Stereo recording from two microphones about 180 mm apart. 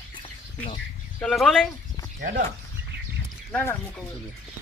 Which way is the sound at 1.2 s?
Centre (ahead or behind).